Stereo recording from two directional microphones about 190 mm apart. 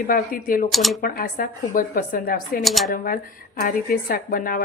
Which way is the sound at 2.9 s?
45° left (ahead or behind).